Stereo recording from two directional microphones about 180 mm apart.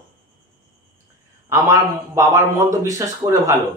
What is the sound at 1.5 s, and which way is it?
A man's voice, 15° right (ahead or behind).